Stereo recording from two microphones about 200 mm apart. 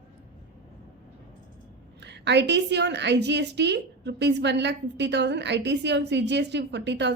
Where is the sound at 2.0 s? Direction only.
60° right (ahead or behind).